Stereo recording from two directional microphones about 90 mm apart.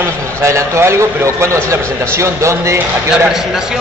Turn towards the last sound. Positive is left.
turn(degrees=-30)  # may be behind; listen again after turning